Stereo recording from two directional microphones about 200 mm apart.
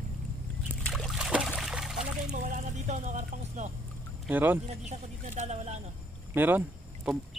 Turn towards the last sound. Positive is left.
turn(degrees=-5)  # may be behind; listen again after turning